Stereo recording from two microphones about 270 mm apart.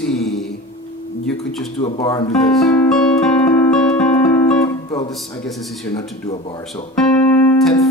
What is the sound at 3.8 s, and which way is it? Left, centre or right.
Music, centre.